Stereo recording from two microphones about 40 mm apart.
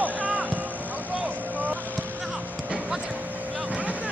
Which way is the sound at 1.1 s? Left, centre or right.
Right.